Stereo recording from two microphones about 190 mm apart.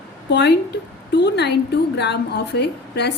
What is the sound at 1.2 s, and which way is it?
A woman's voice, 60° left (ahead or behind).